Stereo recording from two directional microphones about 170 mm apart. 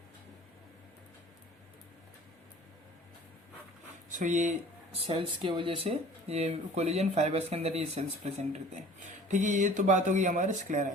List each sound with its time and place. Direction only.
4.2 s speech: 45° right (ahead or behind)
5.0 s speech: 30° right (ahead or behind); by 10.9 s 45° right (ahead or behind)